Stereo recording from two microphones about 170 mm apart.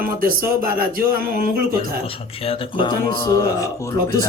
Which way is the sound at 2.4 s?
35° left (ahead or behind).